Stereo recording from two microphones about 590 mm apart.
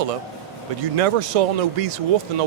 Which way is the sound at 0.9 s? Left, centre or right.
Right.